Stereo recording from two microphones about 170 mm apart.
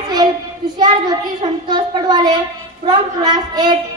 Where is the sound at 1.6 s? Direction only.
25° right (ahead or behind).